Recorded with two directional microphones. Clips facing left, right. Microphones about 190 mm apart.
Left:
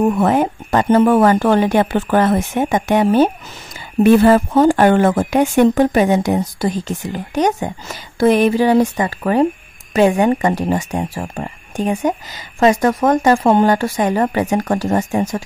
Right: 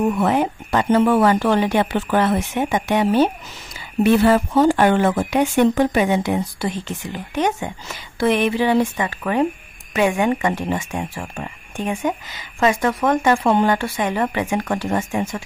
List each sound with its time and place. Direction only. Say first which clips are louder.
0.0 s speech: left 4 dB; 45° left (ahead or behind)